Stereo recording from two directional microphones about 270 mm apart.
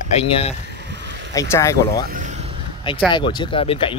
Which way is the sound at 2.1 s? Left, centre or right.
Right.